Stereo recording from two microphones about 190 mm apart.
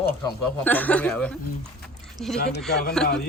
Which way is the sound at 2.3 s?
55° left (ahead or behind).